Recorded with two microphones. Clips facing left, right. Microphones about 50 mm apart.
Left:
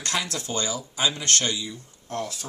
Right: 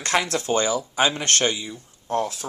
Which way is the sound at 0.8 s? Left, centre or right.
Right.